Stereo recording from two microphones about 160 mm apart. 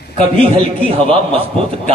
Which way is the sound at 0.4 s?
35° right (ahead or behind).